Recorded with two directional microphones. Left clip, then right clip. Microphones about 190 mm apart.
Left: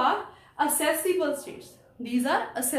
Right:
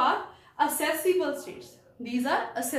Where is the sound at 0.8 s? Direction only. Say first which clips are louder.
Left 1 dB; 20° left (ahead or behind).